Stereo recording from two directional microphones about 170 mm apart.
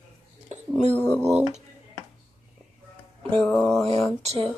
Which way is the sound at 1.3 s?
40° right (ahead or behind).